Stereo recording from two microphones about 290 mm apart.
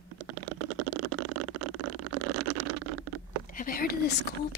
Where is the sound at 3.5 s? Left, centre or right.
Left.